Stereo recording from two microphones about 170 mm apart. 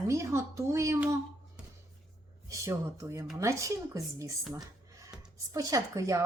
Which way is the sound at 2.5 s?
15° right (ahead or behind).